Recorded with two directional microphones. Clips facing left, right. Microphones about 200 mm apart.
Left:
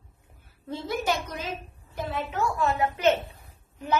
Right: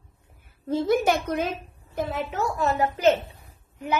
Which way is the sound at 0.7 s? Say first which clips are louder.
Right 7 dB; 55° right (ahead or behind).